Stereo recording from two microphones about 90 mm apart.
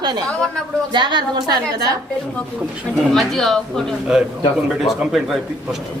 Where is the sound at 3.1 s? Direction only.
5° left (ahead or behind).